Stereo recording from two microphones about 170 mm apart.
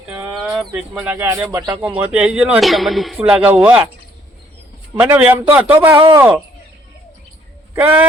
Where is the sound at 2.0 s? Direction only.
5° right (ahead or behind).